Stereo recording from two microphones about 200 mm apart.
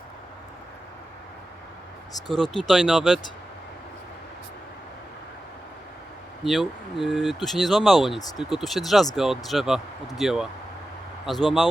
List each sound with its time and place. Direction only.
2.3 s speech: 5° left (ahead or behind)
6.4 s speech: centre (ahead or behind)